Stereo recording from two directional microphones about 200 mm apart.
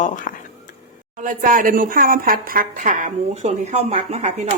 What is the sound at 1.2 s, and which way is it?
Speech, 45° right (ahead or behind).